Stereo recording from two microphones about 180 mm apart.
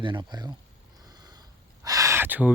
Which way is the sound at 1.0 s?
20° right (ahead or behind).